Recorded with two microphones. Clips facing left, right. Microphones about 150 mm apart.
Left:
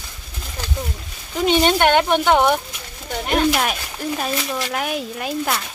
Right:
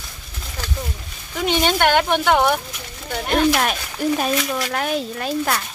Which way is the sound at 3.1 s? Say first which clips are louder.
Right 1 dB; 5° left (ahead or behind).